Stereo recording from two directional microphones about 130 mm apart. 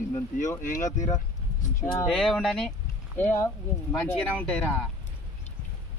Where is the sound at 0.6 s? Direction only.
75° left (ahead or behind).